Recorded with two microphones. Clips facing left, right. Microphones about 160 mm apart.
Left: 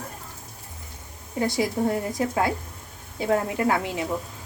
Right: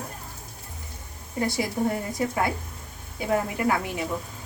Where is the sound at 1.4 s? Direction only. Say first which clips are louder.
Left 2 dB; 20° left (ahead or behind).